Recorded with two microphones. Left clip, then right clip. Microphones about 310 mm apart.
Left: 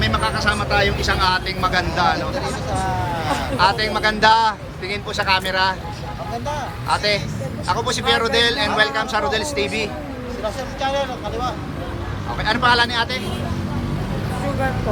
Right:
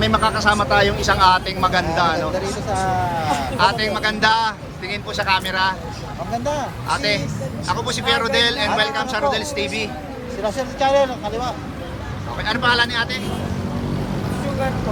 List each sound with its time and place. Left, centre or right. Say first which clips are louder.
0.0 s a man's voice: right 3 dB; centre
3.6 s a man's voice: left 1 dB; centre
6.4 s a sound: right 4 dB; right
6.8 s a man's voice: left 2 dB; centre
10.4 s speech: right 4 dB; right
12.5 s a man's voice: left 1 dB; centre